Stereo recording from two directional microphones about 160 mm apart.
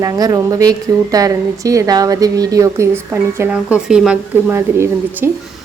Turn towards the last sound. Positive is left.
turn(degrees=-15)  # may be behind; listen again after turning